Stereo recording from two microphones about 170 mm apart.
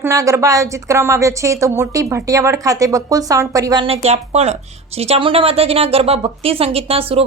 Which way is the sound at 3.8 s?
35° right (ahead or behind).